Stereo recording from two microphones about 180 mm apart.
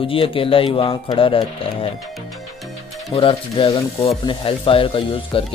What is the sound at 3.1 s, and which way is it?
Speech, 30° left (ahead or behind).